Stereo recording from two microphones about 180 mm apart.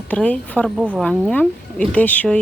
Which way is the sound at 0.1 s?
10° left (ahead or behind).